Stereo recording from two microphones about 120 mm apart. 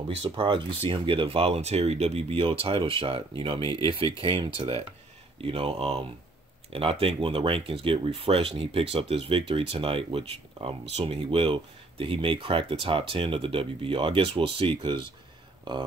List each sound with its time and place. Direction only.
0.2 s speech: 45° right (ahead or behind)
11.2 s speech: 45° right (ahead or behind)